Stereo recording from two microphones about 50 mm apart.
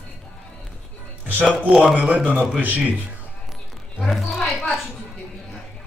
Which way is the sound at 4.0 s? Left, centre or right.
Centre.